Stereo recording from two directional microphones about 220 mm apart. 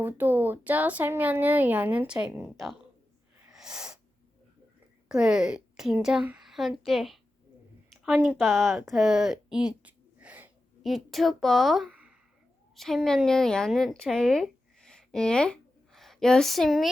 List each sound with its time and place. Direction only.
0.0 s speech: 10° right (ahead or behind)
3.4 s a sound: 5° right (ahead or behind)
5.0 s a woman's voice: 5° right (ahead or behind)